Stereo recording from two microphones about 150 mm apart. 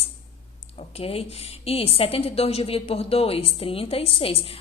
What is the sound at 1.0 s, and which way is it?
A woman's voice, 40° left (ahead or behind).